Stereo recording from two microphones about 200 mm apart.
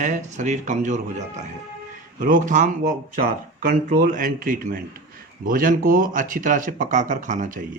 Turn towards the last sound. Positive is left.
turn(degrees=-40)  # may be behind; listen again after turning